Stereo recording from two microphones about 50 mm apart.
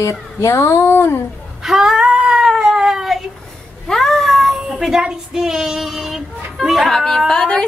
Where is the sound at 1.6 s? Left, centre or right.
Centre.